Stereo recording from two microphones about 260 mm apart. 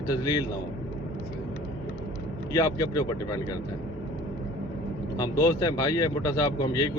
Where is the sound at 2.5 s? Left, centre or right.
Centre.